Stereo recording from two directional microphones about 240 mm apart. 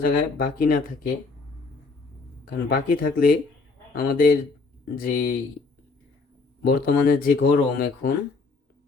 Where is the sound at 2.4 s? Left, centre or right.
Left.